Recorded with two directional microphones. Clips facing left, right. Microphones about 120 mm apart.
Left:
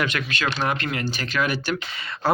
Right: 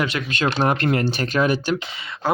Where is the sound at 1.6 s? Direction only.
20° right (ahead or behind).